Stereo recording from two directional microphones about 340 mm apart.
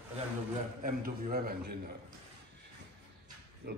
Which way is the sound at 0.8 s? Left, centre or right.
Right.